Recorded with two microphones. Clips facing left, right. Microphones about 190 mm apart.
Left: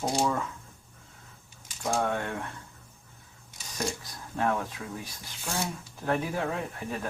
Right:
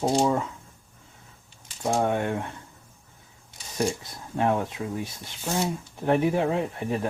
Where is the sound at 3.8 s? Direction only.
25° right (ahead or behind).